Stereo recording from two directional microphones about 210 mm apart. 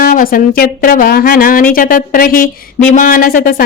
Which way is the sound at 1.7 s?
40° left (ahead or behind).